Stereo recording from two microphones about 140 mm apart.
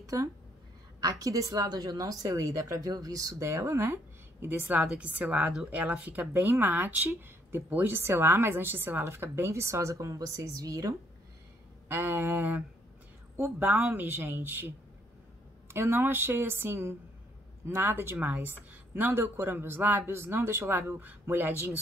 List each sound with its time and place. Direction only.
0.0 s a woman's voice: 25° right (ahead or behind)
15.7 s a woman's voice: 20° right (ahead or behind)